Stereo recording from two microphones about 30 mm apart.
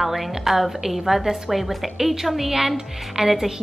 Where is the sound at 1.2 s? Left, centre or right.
Centre.